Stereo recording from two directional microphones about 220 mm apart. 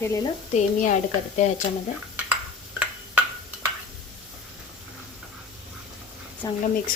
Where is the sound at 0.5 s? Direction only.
35° left (ahead or behind).